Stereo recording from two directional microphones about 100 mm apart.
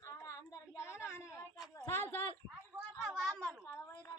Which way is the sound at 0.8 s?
25° left (ahead or behind).